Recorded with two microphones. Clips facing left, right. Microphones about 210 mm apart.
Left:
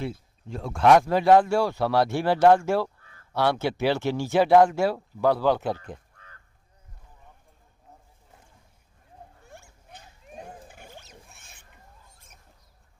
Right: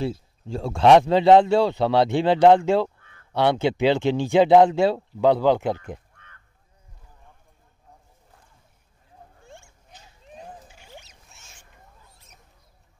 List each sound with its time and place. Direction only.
0.0 s speech: 30° right (ahead or behind)
3.0 s a sound: 35° left (ahead or behind)
3.3 s speech: 20° right (ahead or behind)
6.1 s honk: 35° left (ahead or behind)
10.3 s a sound: 55° left (ahead or behind)
11.2 s rodents: 55° left (ahead or behind)